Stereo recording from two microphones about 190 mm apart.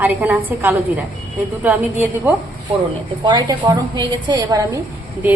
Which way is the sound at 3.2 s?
20° right (ahead or behind).